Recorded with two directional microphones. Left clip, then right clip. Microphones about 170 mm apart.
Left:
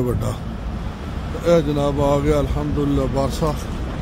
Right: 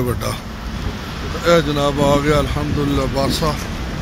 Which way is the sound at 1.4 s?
5° left (ahead or behind).